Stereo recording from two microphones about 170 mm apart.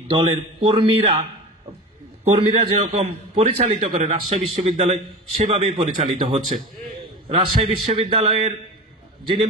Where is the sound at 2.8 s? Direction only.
35° right (ahead or behind).